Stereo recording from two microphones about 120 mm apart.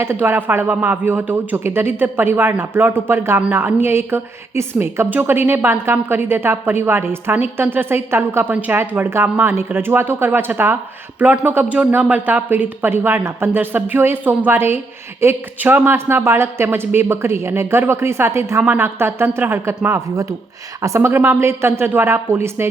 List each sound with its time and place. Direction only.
0.0 s a woman's voice: 20° right (ahead or behind)